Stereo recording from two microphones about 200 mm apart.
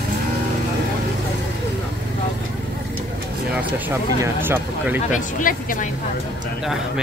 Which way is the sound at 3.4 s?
5° right (ahead or behind).